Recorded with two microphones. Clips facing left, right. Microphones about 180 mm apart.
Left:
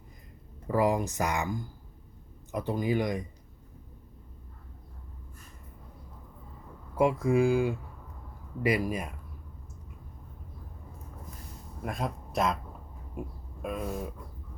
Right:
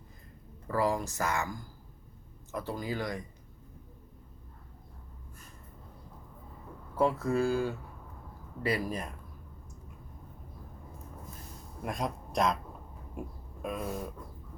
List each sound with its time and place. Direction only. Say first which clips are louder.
0.7 s speech: left 4 dB; 15° left (ahead or behind)
6.9 s speech: left 3 dB; 15° left (ahead or behind)
11.8 s speech: even; centre (ahead or behind)